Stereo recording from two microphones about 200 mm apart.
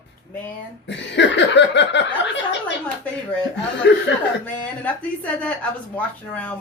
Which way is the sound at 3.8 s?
60° left (ahead or behind).